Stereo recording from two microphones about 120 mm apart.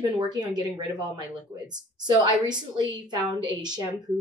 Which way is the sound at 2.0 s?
35° right (ahead or behind).